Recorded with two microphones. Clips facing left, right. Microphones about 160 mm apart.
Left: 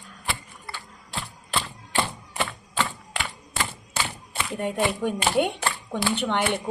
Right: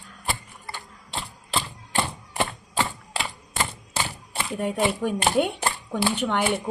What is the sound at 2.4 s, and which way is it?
Typewriter, 35° right (ahead or behind).